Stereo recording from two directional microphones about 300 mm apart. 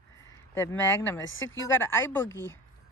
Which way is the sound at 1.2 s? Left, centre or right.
Left.